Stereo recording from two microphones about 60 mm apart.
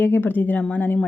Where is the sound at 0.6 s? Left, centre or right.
Left.